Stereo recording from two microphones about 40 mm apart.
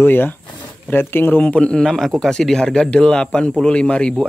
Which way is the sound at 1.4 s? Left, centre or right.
Left.